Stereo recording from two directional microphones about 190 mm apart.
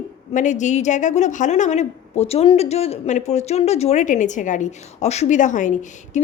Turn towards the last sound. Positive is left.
turn(degrees=40)  # may be behind; listen again after turning